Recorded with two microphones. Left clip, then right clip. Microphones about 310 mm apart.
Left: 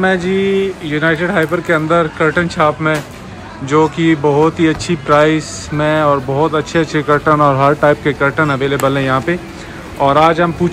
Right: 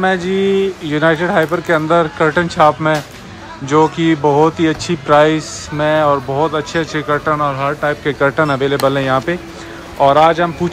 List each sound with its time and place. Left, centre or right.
0.0 s speech: centre